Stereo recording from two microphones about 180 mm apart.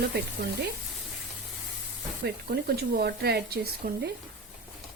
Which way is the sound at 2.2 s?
60° right (ahead or behind).